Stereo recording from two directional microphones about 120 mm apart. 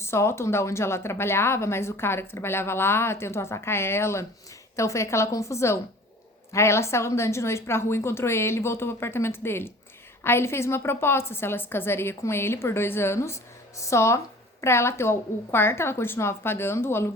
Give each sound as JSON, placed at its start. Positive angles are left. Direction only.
{"t": 0.0, "sound": "a woman's voice", "side_deg": 20}